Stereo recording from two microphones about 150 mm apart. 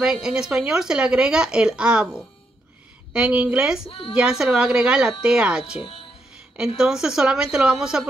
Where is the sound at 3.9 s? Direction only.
35° left (ahead or behind).